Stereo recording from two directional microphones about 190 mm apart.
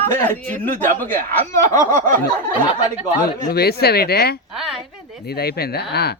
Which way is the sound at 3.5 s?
55° left (ahead or behind).